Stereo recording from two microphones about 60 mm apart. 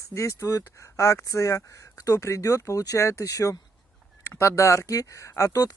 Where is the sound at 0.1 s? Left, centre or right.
Left.